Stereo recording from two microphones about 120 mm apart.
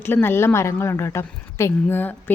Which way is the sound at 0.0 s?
20° left (ahead or behind).